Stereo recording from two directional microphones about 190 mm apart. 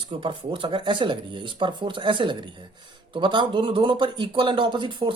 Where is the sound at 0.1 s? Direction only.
25° right (ahead or behind).